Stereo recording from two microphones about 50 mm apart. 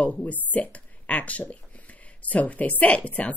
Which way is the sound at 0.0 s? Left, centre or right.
Left.